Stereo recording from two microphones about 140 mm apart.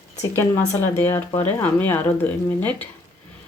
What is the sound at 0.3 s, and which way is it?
Speech, 15° left (ahead or behind).